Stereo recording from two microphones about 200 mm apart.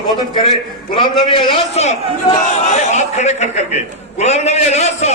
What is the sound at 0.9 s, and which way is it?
A man's voice, 25° left (ahead or behind).